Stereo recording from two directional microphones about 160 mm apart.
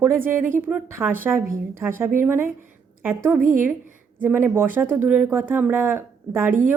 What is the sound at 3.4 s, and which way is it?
Speech, 55° right (ahead or behind).